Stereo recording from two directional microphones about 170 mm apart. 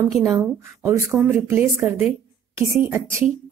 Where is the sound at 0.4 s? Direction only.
15° right (ahead or behind).